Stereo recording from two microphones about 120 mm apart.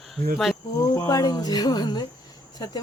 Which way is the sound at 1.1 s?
30° left (ahead or behind).